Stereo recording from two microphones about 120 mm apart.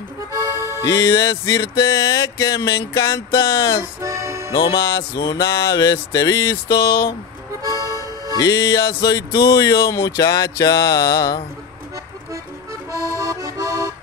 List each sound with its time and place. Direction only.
0.6 s music: 20° right (ahead or behind)
0.8 s speech: 30° left (ahead or behind)
4.0 s speech: 25° right (ahead or behind)
4.5 s speech: 30° left (ahead or behind)
7.6 s music: 25° right (ahead or behind)
8.4 s speech: 30° left (ahead or behind)
12.9 s accordion: 25° right (ahead or behind)